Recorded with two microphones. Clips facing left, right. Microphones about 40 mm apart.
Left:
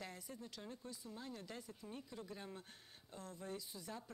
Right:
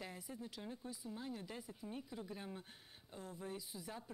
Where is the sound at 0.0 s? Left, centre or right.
Centre.